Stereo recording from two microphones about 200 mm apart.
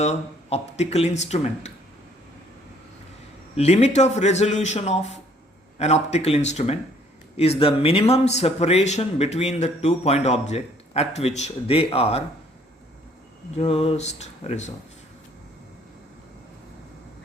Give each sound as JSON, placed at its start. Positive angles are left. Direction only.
{"t": 0.0, "sound": "speech", "side_deg": 35}
{"t": 3.5, "sound": "speech", "side_deg": 30}
{"t": 13.6, "sound": "speech", "side_deg": 30}